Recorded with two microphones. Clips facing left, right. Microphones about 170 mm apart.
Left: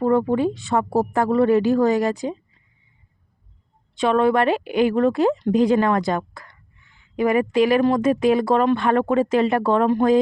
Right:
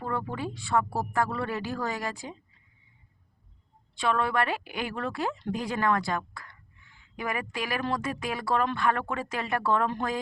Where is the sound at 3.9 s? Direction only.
20° left (ahead or behind).